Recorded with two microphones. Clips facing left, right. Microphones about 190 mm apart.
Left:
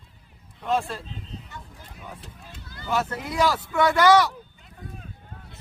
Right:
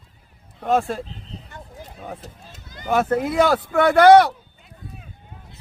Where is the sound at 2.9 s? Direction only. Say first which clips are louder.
Right 8 dB; 55° right (ahead or behind).